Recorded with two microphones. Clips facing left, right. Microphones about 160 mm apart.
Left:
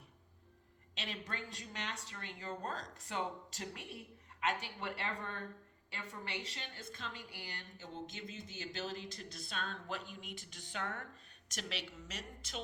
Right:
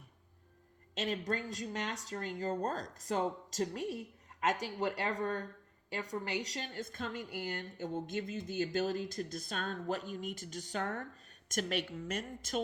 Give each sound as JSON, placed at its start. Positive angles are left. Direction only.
{"t": 0.9, "sound": "a woman's voice", "side_deg": -45}